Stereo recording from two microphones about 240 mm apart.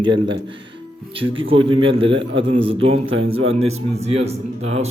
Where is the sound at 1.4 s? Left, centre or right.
Right.